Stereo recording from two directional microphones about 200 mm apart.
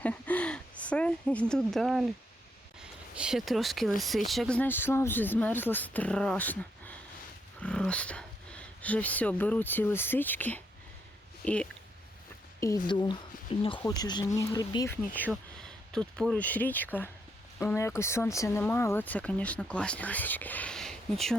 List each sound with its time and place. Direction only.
0.0 s speech: 5° left (ahead or behind)
12.5 s a sound: 15° left (ahead or behind)
12.9 s speech: 25° left (ahead or behind)
15.1 s speech: 10° left (ahead or behind)